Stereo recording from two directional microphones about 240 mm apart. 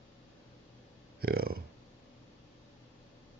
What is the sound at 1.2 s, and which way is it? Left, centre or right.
Burping, right.